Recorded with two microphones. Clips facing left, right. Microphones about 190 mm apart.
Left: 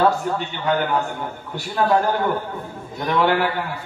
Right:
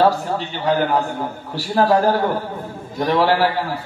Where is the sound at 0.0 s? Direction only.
35° right (ahead or behind).